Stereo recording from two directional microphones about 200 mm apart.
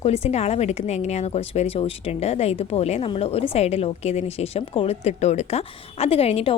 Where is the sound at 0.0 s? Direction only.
30° left (ahead or behind).